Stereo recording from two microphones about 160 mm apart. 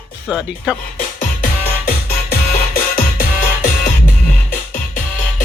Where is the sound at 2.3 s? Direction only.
70° left (ahead or behind).